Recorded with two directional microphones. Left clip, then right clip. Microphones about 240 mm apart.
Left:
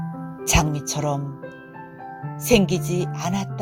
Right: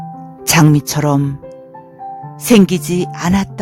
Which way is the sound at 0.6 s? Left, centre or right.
Right.